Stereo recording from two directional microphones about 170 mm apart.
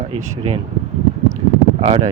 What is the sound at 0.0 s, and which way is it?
Speech, 40° right (ahead or behind).